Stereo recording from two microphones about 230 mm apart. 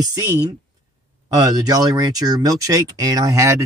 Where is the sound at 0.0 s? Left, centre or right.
Centre.